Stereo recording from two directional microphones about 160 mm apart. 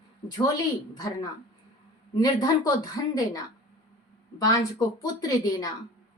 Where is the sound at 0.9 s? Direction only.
20° left (ahead or behind).